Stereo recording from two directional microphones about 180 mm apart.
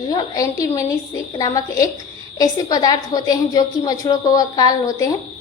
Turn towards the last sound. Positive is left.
turn(degrees=20)  # may be behind; listen again after turning